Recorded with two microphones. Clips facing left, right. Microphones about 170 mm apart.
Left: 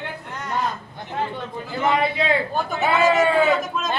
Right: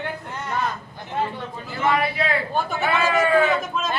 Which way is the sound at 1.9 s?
25° left (ahead or behind).